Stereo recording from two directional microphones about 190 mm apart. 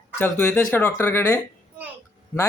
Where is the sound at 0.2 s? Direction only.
10° left (ahead or behind).